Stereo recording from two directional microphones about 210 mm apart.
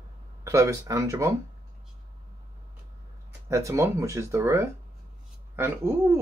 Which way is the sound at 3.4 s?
15° right (ahead or behind).